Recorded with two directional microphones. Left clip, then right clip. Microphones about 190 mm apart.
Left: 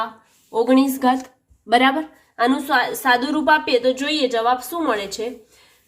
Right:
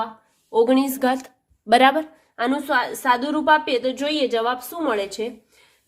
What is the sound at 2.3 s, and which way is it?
A woman's voice, 20° right (ahead or behind).